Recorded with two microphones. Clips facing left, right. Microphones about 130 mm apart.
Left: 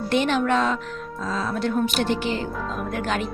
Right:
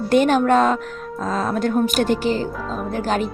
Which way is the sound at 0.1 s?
45° right (ahead or behind).